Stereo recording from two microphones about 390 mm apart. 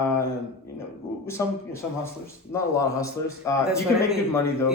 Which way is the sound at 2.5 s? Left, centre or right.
Centre.